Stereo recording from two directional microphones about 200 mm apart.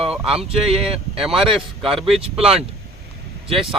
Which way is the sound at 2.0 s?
30° right (ahead or behind).